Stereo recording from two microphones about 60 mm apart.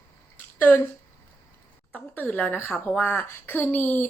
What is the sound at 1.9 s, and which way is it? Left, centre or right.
A woman's voice, left.